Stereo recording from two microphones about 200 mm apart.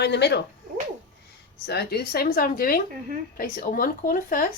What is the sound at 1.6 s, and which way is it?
Speech, 55° left (ahead or behind).